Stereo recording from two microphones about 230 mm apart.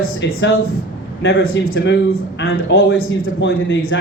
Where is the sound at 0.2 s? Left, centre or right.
Left.